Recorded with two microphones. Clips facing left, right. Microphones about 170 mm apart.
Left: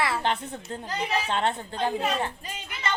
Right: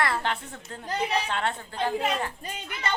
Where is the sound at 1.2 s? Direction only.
20° left (ahead or behind).